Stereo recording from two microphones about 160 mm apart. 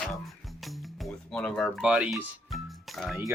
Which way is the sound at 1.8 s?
5° right (ahead or behind).